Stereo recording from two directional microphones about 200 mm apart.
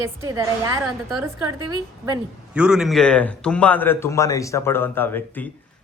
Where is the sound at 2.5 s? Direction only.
5° right (ahead or behind).